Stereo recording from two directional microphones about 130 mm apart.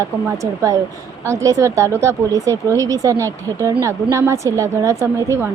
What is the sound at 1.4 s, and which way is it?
Speech, 25° right (ahead or behind).